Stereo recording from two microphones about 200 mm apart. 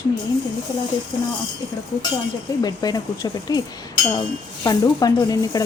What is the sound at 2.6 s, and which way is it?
Speech, 20° left (ahead or behind).